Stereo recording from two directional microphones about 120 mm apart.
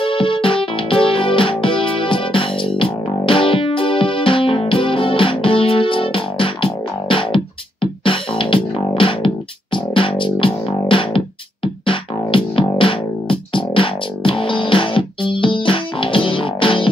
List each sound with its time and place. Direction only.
0.0 s music: 45° left (ahead or behind)